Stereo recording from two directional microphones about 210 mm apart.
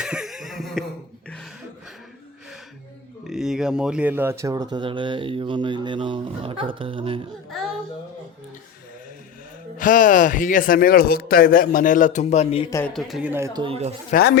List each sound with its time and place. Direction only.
0.0 s a sound: centre (ahead or behind)
3.2 s speech: centre (ahead or behind); by 7.3 s 25° right (ahead or behind)
9.7 s speech: 40° left (ahead or behind)
12.7 s speech: 5° left (ahead or behind); by 13.9 s 30° right (ahead or behind)
14.1 s speech: 45° left (ahead or behind)